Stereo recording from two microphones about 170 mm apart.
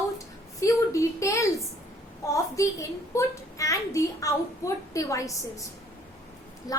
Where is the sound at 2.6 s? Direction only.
20° left (ahead or behind).